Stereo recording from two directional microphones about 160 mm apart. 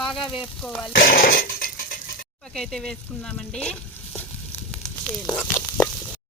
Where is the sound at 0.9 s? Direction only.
65° left (ahead or behind).